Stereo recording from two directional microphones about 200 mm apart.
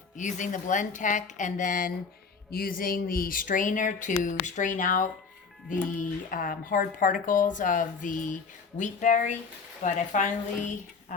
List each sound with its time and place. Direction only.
0.2 s speech: 40° left (ahead or behind)
6.3 s speech: 45° left (ahead or behind)